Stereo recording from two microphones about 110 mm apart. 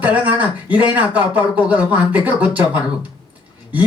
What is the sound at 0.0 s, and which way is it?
Speech, 15° right (ahead or behind).